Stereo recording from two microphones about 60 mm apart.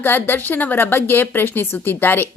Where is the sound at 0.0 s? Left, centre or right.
Left.